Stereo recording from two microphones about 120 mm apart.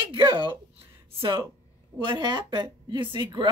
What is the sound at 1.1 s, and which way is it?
A woman's voice, 45° right (ahead or behind).